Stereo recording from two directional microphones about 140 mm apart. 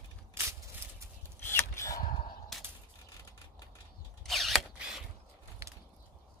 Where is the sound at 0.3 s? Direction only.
15° right (ahead or behind).